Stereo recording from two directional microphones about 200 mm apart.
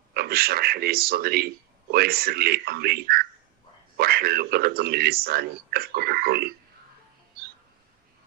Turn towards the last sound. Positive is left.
turn(degrees=-50)  # may be behind; listen again after turning